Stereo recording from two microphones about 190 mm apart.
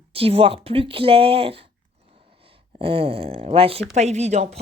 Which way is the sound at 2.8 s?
30° right (ahead or behind).